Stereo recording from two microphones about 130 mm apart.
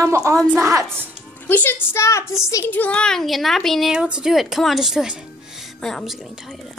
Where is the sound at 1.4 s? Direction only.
15° left (ahead or behind).